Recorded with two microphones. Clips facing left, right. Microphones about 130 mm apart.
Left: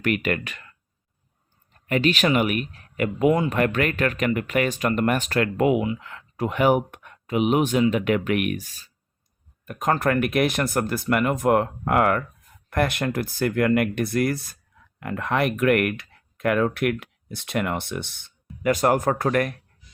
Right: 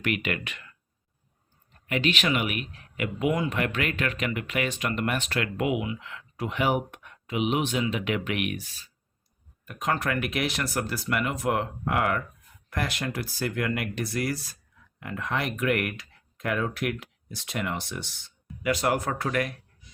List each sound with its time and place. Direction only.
0.0 s speech: 45° left (ahead or behind)
1.9 s speech: 40° left (ahead or behind)